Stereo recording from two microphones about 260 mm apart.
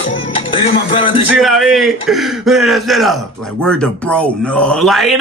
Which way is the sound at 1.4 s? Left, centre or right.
Centre.